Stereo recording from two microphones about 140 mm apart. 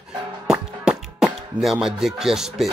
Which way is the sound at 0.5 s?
5° right (ahead or behind).